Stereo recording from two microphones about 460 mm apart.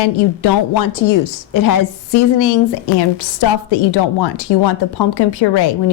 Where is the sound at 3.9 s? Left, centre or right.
Left.